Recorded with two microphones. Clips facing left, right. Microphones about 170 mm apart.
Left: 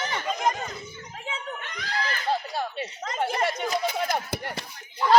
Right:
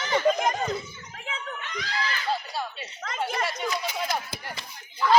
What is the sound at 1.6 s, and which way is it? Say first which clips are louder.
Screaming: right 1 dB; 55° left (ahead or behind).